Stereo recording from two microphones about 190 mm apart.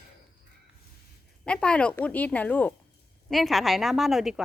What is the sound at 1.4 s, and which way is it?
A woman's voice, 5° left (ahead or behind).